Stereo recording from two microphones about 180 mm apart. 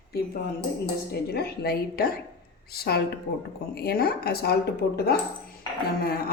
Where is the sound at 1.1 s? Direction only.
60° left (ahead or behind).